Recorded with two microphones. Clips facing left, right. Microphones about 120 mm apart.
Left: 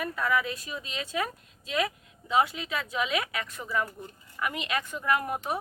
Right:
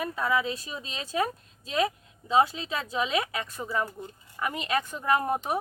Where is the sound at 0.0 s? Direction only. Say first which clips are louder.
Right 1 dB; 25° right (ahead or behind).